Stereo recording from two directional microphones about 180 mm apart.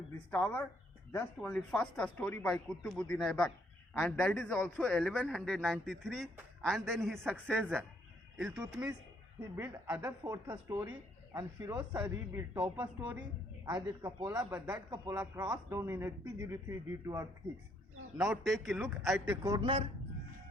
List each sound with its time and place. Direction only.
0.3 s a man's voice: 10° left (ahead or behind)
9.6 s speech: 15° right (ahead or behind)
13.0 s speech: 5° right (ahead or behind)
13.7 s speech: 25° right (ahead or behind)
18.2 s a man's voice: centre (ahead or behind)
19.4 s speech: 20° right (ahead or behind)